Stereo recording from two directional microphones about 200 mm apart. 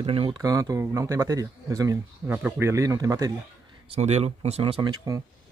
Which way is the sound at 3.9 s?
30° right (ahead or behind).